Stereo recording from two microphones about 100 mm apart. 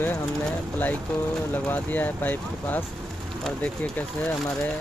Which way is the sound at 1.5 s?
20° left (ahead or behind).